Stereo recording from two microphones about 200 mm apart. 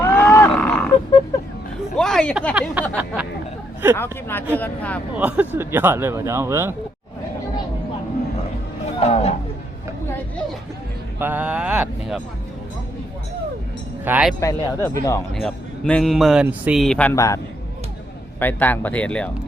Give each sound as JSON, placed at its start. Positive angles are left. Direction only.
{"t": 0.0, "sound": "a sound", "side_deg": 10}
{"t": 2.0, "sound": "speech", "side_deg": 0}
{"t": 2.8, "sound": "speech", "side_deg": -5}
{"t": 3.9, "sound": "speech", "side_deg": 10}
{"t": 5.1, "sound": "speech", "side_deg": -10}
{"t": 9.0, "sound": "speech", "side_deg": 30}
{"t": 11.2, "sound": "speech", "side_deg": -10}
{"t": 14.0, "sound": "speech", "side_deg": -5}
{"t": 14.4, "sound": "speech", "side_deg": 15}
{"t": 15.4, "sound": "speech", "side_deg": 5}